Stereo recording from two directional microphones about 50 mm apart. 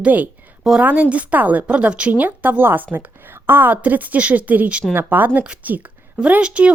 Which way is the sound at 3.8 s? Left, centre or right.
Right.